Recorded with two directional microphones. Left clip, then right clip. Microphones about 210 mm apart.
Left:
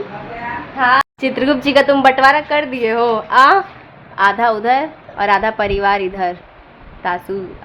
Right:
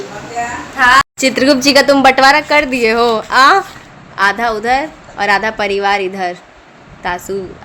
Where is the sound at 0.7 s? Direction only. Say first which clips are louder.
Right 4 dB; 5° right (ahead or behind).